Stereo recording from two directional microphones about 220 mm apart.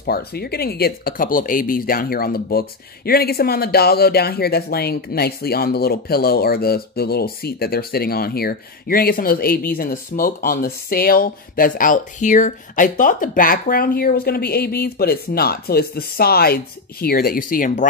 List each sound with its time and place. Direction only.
0.0 s speech: 45° left (ahead or behind)